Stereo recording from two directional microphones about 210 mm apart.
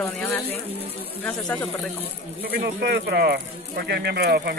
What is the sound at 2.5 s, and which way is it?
Speech, 50° right (ahead or behind).